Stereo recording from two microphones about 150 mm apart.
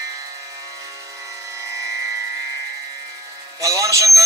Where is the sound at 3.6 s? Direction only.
20° right (ahead or behind).